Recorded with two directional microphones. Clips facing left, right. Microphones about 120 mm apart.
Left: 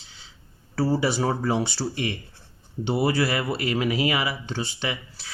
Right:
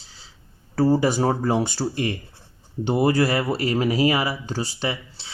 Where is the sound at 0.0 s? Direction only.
35° right (ahead or behind).